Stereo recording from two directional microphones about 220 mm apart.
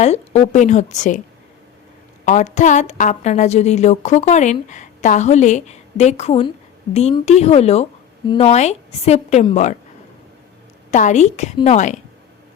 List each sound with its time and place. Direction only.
0.0 s a woman's voice: 30° left (ahead or behind)
2.2 s a woman's voice: 35° left (ahead or behind)
10.9 s a woman's voice: 30° left (ahead or behind)